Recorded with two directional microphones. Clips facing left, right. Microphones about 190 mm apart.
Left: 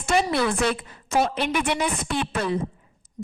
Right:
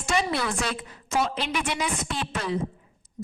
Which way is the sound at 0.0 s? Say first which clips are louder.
Left 4 dB; 55° left (ahead or behind).